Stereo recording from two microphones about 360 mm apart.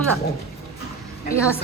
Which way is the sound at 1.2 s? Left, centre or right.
Centre.